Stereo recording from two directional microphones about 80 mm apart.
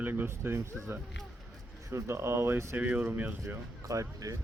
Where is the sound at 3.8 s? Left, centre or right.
Right.